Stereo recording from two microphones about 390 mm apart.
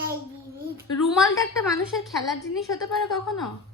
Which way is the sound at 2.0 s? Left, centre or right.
Centre.